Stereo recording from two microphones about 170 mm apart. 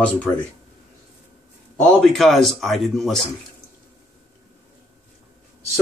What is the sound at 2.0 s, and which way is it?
Speech, centre (ahead or behind).